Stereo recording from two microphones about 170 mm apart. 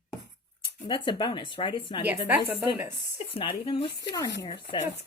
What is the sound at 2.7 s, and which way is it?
Speech, 15° right (ahead or behind).